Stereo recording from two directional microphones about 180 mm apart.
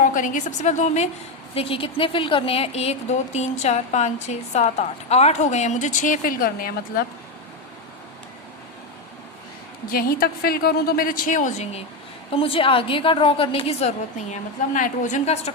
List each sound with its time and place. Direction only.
0.0 s speech: 45° left (ahead or behind)
9.9 s a woman's voice: 55° left (ahead or behind); by 15.5 s 40° left (ahead or behind)